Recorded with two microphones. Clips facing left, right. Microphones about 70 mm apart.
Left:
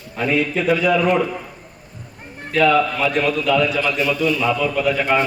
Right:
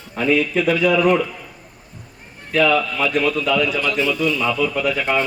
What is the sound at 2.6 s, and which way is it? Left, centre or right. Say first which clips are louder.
Speech: left 2 dB; left.